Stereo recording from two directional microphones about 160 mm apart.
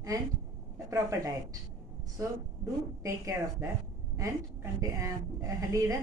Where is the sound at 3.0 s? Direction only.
20° right (ahead or behind).